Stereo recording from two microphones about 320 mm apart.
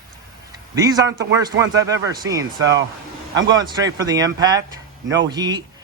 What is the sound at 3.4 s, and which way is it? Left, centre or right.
A man's voice, centre.